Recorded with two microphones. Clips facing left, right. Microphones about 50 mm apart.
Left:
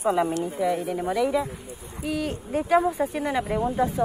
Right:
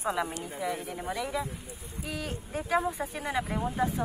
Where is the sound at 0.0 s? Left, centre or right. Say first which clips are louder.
Left 8 dB; left.